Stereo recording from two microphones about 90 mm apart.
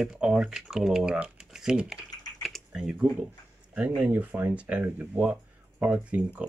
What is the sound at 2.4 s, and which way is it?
Typing, 5° left (ahead or behind).